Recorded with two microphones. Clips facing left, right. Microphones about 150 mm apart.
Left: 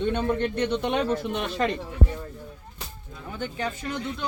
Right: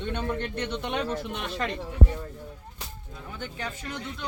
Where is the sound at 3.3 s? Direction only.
25° left (ahead or behind).